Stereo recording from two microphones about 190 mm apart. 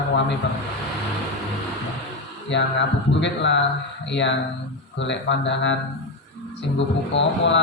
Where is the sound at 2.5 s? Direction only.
70° left (ahead or behind).